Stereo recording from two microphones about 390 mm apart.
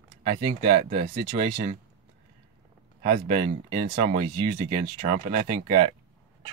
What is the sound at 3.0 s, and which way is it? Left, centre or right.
Speech, right.